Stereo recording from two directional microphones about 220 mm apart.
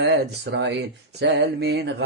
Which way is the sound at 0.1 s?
50° right (ahead or behind).